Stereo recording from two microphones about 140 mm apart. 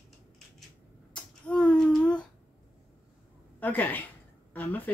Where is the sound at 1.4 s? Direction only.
5° left (ahead or behind).